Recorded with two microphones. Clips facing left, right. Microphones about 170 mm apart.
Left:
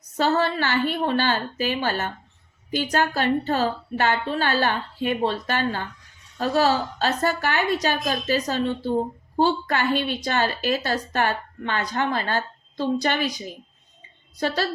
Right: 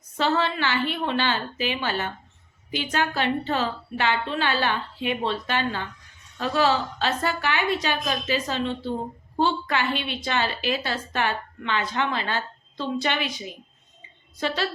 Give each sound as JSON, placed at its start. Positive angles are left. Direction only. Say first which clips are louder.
{"t": 0.2, "sound": "a woman's voice", "louder": "left 2 dB", "side_deg": 40}